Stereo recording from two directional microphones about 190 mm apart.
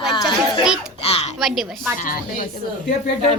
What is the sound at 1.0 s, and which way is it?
Speech, 30° left (ahead or behind).